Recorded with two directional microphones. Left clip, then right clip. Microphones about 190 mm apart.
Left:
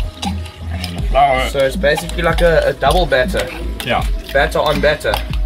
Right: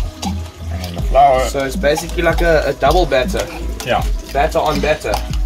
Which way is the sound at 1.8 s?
45° right (ahead or behind).